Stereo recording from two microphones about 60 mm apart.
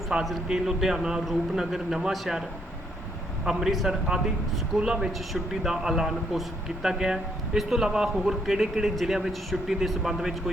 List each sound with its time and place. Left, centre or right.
0.1 s a man's voice: centre
3.4 s a man's voice: centre